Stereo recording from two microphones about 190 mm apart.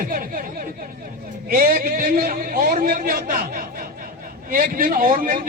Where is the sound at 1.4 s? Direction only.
50° right (ahead or behind).